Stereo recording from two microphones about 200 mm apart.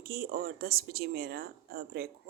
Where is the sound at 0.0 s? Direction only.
50° right (ahead or behind).